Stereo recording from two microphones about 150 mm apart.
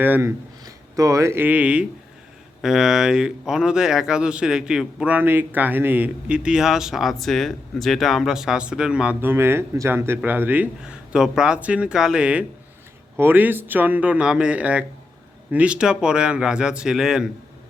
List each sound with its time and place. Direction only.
0.0 s speech: 15° right (ahead or behind)